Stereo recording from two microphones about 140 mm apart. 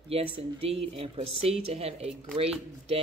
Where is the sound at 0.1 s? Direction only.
45° right (ahead or behind).